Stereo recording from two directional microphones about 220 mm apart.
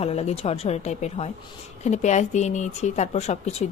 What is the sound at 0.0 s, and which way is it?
A woman's voice, 30° left (ahead or behind).